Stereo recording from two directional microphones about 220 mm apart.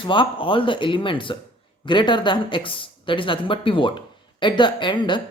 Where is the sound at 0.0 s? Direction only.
20° left (ahead or behind).